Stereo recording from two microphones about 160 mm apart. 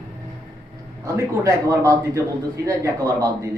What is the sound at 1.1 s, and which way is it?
A man's voice, 20° right (ahead or behind).